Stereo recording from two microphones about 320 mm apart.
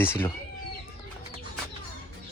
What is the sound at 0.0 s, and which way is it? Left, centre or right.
Speech, centre.